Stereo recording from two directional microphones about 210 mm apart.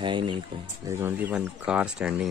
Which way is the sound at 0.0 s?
25° right (ahead or behind).